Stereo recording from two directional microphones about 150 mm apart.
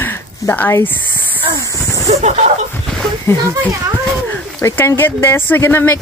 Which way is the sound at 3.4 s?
25° right (ahead or behind).